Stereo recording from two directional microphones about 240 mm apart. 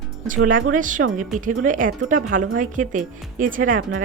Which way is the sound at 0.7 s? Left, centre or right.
Right.